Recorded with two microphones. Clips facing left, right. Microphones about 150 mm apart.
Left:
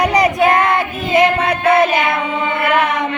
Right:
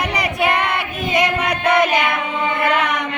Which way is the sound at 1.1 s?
25° left (ahead or behind).